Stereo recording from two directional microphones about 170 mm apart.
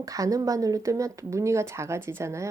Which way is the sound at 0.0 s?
20° right (ahead or behind).